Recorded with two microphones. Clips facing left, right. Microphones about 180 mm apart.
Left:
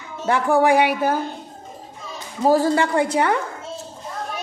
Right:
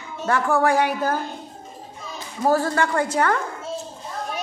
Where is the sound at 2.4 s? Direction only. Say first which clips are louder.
Left 3 dB; 20° left (ahead or behind).